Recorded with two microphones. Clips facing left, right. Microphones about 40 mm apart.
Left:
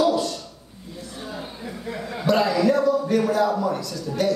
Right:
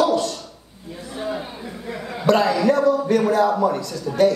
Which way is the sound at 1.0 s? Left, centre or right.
Right.